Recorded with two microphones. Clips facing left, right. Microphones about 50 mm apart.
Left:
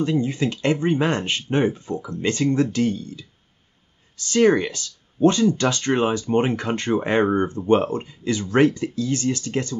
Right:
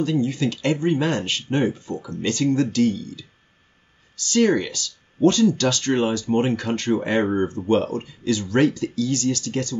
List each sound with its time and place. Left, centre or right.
0.0 s speech: left